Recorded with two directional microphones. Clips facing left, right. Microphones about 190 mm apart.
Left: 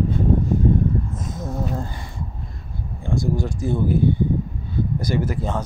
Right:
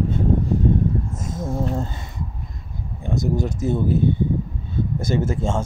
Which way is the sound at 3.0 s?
20° right (ahead or behind).